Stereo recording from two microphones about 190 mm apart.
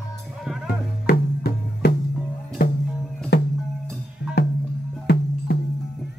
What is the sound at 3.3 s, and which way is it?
Music, 55° left (ahead or behind).